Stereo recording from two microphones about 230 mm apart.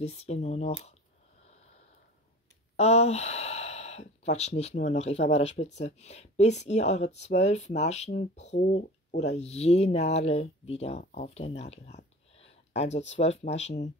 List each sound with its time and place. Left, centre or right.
0.0 s speech: left
2.7 s speech: left